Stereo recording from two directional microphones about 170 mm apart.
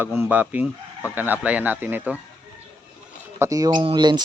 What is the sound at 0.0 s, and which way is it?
Speech, 15° right (ahead or behind).